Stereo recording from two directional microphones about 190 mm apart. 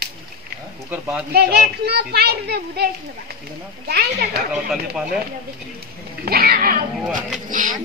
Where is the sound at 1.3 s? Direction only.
55° right (ahead or behind).